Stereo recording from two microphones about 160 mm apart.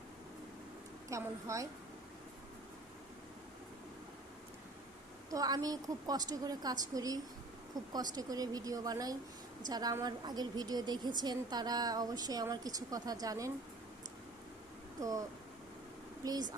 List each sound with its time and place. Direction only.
1.1 s a woman's voice: 20° right (ahead or behind)
5.3 s a woman's voice: 25° right (ahead or behind)
16.2 s a woman's voice: 25° right (ahead or behind)